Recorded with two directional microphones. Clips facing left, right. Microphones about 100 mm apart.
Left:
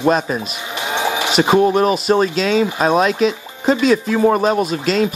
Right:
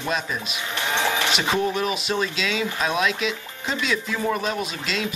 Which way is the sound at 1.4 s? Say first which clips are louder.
Left 10 dB; 45° left (ahead or behind).